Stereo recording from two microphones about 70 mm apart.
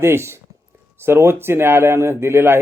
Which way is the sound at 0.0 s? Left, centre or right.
Right.